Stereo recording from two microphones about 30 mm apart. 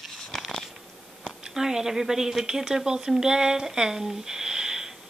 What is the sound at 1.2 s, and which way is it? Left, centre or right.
A woman's voice, centre.